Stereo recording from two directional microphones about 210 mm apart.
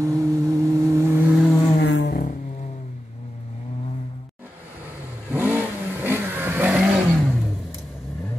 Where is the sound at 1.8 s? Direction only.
55° left (ahead or behind).